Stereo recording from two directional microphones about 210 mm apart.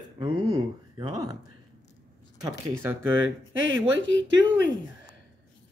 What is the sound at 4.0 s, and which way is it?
Speech, 65° right (ahead or behind).